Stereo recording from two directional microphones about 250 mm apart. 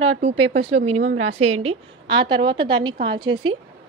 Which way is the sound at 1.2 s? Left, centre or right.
Right.